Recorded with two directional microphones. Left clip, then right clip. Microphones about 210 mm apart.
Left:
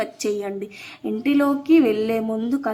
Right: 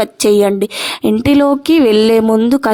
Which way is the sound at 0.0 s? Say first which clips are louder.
Right 14 dB; 45° right (ahead or behind).